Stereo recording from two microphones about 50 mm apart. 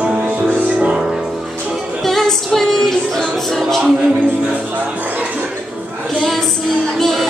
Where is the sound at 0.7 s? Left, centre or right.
Right.